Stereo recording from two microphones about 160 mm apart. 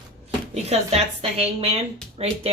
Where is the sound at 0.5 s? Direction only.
40° right (ahead or behind).